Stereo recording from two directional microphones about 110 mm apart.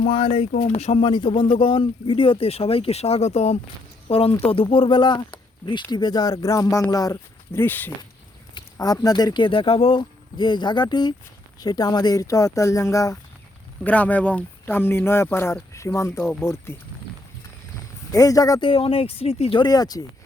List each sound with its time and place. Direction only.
0.0 s speech: 55° left (ahead or behind); by 1.0 s 70° left (ahead or behind)
1.0 s speech: 45° left (ahead or behind); by 3.6 s 75° left (ahead or behind)
4.1 s speech: 60° left (ahead or behind); by 7.6 s 35° left (ahead or behind)
7.6 s speech: 20° left (ahead or behind)
8.5 s speech: 35° left (ahead or behind)
13.8 s speech: 15° left (ahead or behind)
18.1 s speech: 30° left (ahead or behind)
18.6 s speech: 60° left (ahead or behind)
19.6 s speech: 35° left (ahead or behind)